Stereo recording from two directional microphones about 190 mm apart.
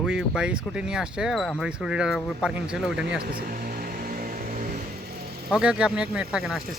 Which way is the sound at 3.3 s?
50° right (ahead or behind).